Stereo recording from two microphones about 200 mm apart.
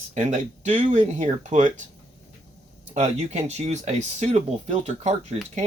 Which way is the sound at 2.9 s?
35° right (ahead or behind).